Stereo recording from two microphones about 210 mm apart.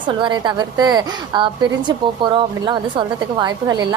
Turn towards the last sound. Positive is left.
turn(degrees=-20)  # may be behind; listen again after turning